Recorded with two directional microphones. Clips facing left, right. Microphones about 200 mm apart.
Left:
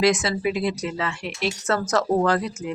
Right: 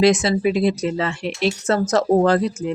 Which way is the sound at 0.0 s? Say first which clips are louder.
Right 5 dB; 25° right (ahead or behind).